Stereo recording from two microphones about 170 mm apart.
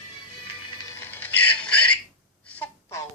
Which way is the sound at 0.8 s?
15° left (ahead or behind).